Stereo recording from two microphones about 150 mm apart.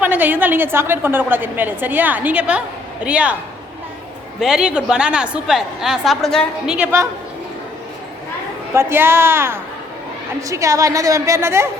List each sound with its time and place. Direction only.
0.0 s a woman's voice: 10° right (ahead or behind)
4.4 s a woman's voice: 5° right (ahead or behind)
6.7 s a woman's voice: 15° right (ahead or behind)
8.7 s a woman's voice: 15° right (ahead or behind)